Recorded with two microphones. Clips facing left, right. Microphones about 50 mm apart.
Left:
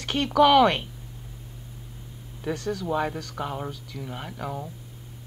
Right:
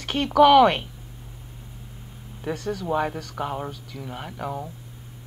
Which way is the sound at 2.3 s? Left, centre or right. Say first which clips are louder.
Even; centre.